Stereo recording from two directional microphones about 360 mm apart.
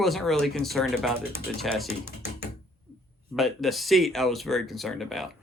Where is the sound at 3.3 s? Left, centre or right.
Centre.